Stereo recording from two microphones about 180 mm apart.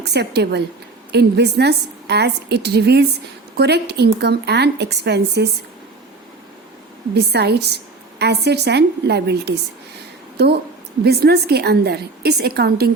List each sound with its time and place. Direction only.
0.0 s a woman's voice: 65° right (ahead or behind)
7.1 s a woman's voice: 65° right (ahead or behind)